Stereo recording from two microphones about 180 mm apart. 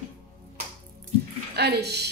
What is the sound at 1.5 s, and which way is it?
Speech, 65° right (ahead or behind).